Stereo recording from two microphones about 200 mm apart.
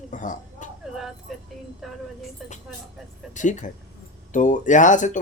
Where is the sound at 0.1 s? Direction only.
40° left (ahead or behind).